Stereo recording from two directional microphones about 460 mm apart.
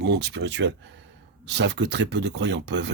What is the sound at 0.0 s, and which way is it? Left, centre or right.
Speech, right.